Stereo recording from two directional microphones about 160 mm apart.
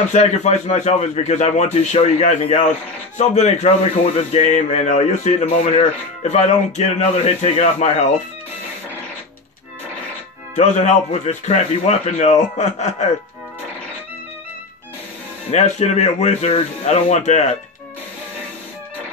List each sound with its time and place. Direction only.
0.1 s speech: 45° left (ahead or behind)
10.5 s speech: 45° left (ahead or behind)
15.5 s speech: 45° left (ahead or behind)